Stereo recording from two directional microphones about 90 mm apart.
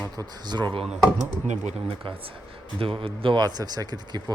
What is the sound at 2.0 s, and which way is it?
Speech, 75° right (ahead or behind).